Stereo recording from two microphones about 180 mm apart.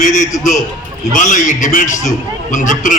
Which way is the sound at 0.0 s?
40° left (ahead or behind).